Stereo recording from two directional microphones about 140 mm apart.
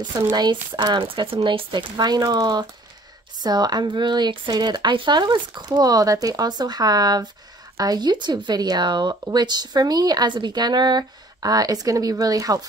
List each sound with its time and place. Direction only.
0.1 s speech: 30° right (ahead or behind)